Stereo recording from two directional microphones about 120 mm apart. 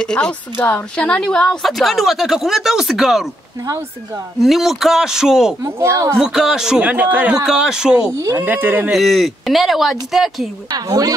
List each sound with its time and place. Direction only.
0.0 s a woman's voice: 5° left (ahead or behind)
4.4 s a woman's voice: centre (ahead or behind)
5.6 s speech: 25° right (ahead or behind)
6.1 s a woman's voice: 5° right (ahead or behind)
8.9 s a woman's voice: centre (ahead or behind)
10.9 s speech: 30° right (ahead or behind)